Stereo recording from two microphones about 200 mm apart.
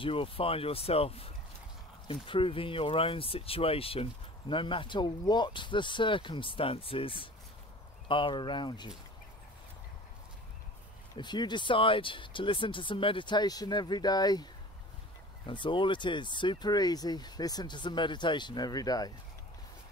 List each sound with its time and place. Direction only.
0.0 s speech: 25° left (ahead or behind)
11.1 s speech: 20° left (ahead or behind)